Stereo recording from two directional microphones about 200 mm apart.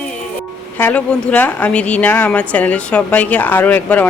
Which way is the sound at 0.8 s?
5° left (ahead or behind).